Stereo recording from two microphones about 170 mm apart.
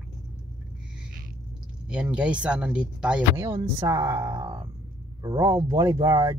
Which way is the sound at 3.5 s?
15° right (ahead or behind).